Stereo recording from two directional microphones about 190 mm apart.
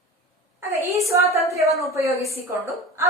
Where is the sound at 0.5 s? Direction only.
15° right (ahead or behind).